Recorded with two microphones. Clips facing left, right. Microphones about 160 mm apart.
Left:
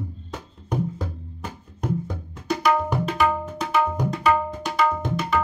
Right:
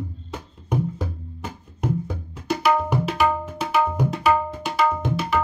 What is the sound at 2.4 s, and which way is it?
Tabla, 5° right (ahead or behind).